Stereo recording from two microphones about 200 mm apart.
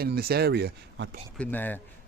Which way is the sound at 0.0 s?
50° right (ahead or behind).